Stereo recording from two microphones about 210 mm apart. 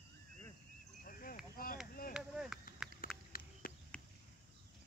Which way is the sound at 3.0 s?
45° left (ahead or behind).